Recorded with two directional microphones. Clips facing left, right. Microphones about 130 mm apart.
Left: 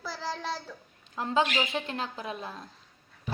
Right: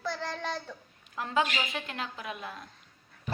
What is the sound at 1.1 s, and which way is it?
A woman's voice, 25° left (ahead or behind).